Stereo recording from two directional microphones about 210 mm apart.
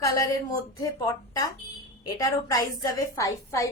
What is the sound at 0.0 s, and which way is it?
A woman's voice, 15° left (ahead or behind).